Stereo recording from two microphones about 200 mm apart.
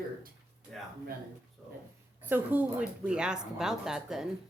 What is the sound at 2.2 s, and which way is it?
Speech, 10° right (ahead or behind).